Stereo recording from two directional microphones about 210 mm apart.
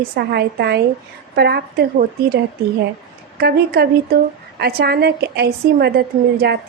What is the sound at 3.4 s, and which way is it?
Speech, 50° right (ahead or behind).